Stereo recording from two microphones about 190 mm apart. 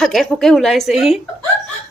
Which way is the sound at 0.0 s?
Centre (ahead or behind).